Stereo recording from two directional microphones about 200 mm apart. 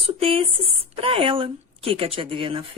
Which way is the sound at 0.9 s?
25° right (ahead or behind).